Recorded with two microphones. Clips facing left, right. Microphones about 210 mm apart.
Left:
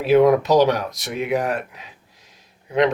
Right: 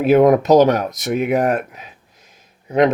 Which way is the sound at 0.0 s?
50° right (ahead or behind).